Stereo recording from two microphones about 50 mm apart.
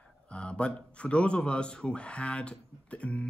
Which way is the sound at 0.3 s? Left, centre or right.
Left.